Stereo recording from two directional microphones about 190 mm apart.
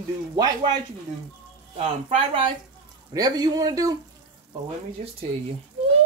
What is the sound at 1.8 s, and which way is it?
Speech, 30° right (ahead or behind).